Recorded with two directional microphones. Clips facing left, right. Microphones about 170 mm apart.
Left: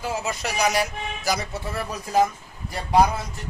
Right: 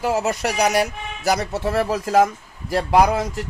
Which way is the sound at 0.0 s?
70° right (ahead or behind).